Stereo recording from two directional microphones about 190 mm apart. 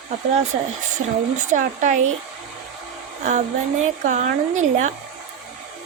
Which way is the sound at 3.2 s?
40° right (ahead or behind).